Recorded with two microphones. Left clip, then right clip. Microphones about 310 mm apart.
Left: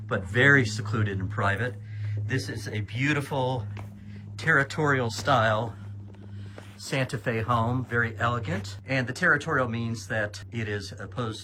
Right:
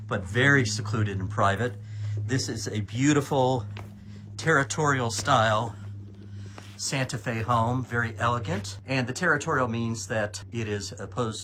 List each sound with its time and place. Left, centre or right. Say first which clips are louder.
0.1 s speech: left 2 dB; centre
6.8 s speech: left 1 dB; centre